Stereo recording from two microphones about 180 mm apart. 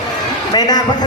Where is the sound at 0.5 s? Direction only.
25° left (ahead or behind).